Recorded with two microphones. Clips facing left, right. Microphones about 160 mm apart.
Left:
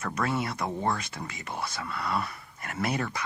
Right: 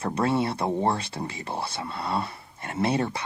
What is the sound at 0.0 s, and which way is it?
A woman's voice, 30° right (ahead or behind).